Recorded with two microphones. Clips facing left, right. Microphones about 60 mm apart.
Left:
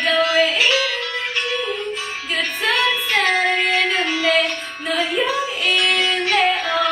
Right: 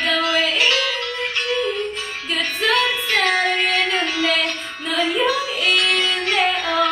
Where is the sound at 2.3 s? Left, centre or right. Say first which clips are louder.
Right 1 dB; centre.